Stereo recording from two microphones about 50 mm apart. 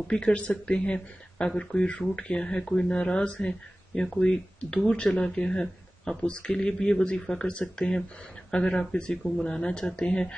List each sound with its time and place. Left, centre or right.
0.1 s speech: left